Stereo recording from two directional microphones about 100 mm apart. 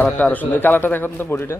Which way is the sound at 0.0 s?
15° left (ahead or behind).